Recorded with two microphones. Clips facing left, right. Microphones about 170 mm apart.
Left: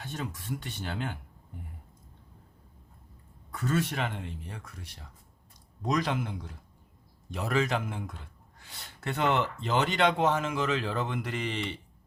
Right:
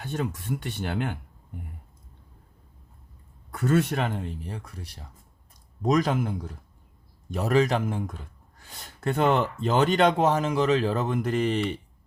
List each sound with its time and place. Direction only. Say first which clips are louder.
0.0 s speech: right 7 dB; 55° right (ahead or behind)
3.5 s speech: right 6 dB; 55° right (ahead or behind); by 5.0 s 35° right (ahead or behind)
5.8 s speech: right 6 dB; 45° right (ahead or behind)